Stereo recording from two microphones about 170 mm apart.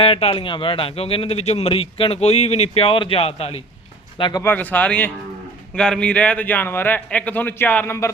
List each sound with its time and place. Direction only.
0.0 s a man's voice: 35° left (ahead or behind)
4.2 s speech: 25° left (ahead or behind)
4.4 s a man's voice: 10° left (ahead or behind)